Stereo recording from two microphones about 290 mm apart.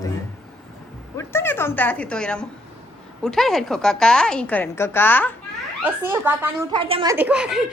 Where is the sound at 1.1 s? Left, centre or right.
Centre.